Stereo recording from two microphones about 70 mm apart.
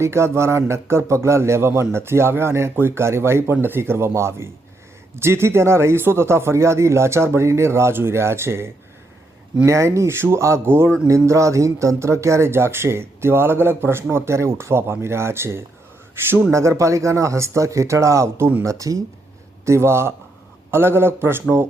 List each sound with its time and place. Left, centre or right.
0.0 s speech: right
11.1 s speech: right
19.6 s speech: right